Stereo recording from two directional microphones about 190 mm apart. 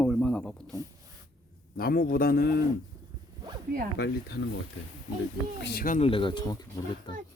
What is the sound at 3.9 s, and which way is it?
Speech, 60° left (ahead or behind).